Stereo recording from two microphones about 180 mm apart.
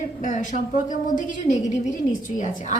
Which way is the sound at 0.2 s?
40° left (ahead or behind).